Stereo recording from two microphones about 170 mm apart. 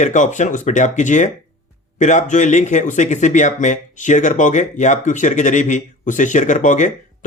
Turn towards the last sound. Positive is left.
turn(degrees=45)  # may be behind; listen again after turning